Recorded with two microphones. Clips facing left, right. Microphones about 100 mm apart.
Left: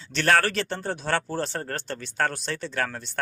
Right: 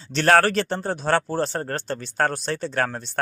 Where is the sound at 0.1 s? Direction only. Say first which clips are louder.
Right 5 dB; 40° right (ahead or behind).